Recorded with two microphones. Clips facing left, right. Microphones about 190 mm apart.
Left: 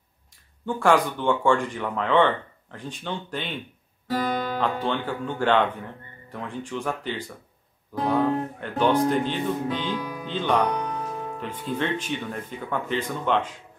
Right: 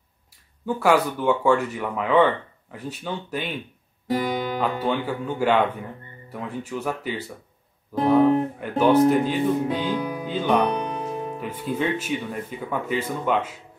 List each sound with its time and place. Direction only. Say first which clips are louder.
0.7 s speech: right 1 dB; 5° right (ahead or behind)
4.6 s speech: right 2 dB; 10° right (ahead or behind)
9.9 s music: right 4 dB; 25° right (ahead or behind)
10.2 s speech: right 2 dB; 10° right (ahead or behind)
10.6 s music: right 2 dB; 20° right (ahead or behind)
11.4 s speech: right 2 dB; 10° right (ahead or behind)